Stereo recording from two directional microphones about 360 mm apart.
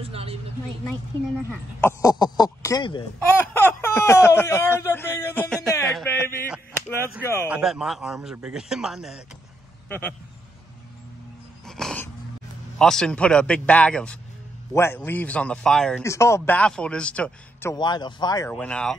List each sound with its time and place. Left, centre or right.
0.0 s speech: centre
1.5 s a man's voice: centre
11.6 s dog: centre
12.7 s a man's voice: centre